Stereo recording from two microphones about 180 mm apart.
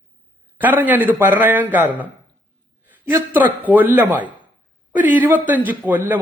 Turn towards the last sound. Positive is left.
turn(degrees=-10)  # may be behind; listen again after turning